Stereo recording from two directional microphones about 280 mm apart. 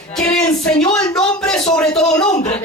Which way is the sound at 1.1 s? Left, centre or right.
Centre.